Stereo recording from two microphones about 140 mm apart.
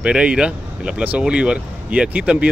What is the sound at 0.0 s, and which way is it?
Speech, 10° right (ahead or behind).